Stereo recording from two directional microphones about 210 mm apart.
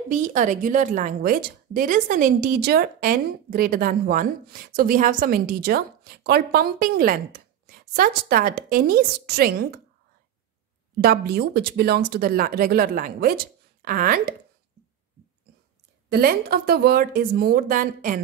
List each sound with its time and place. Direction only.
0.1 s a woman's voice: 35° right (ahead or behind)
11.0 s a woman's voice: 50° right (ahead or behind)
16.1 s a woman's voice: 45° right (ahead or behind)